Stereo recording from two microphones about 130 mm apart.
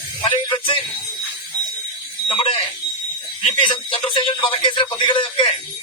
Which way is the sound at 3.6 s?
40° left (ahead or behind).